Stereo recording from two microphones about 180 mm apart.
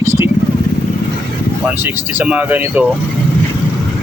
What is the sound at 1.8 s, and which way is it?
Speech, 10° right (ahead or behind).